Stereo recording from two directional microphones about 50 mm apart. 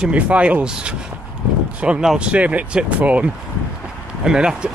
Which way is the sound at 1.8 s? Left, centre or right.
Centre.